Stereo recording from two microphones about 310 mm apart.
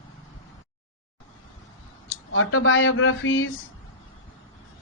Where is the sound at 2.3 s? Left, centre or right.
Left.